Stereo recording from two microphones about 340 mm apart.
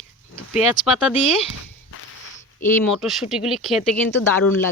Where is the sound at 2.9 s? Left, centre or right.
Centre.